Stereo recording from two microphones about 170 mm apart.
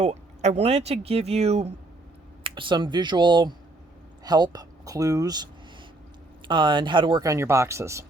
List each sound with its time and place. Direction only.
0.0 s speech: 40° right (ahead or behind); by 5.5 s 25° right (ahead or behind)
6.5 s speech: 25° right (ahead or behind)